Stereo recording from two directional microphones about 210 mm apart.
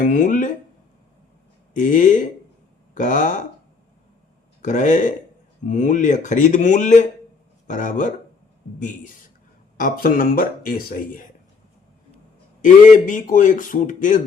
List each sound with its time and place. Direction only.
0.0 s a man's voice: 40° left (ahead or behind)
1.7 s a man's voice: 35° left (ahead or behind)
4.6 s a man's voice: 35° left (ahead or behind)
9.7 s a man's voice: 40° left (ahead or behind)
12.6 s a man's voice: 40° left (ahead or behind)